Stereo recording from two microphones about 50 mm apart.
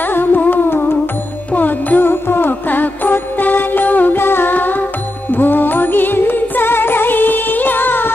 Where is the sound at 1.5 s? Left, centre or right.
Left.